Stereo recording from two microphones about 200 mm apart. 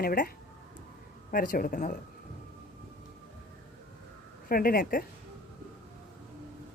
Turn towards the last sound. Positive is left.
turn(degrees=50)  # may be behind; listen again after turning